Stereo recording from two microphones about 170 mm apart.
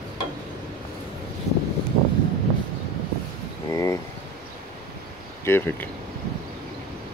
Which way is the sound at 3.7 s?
20° left (ahead or behind).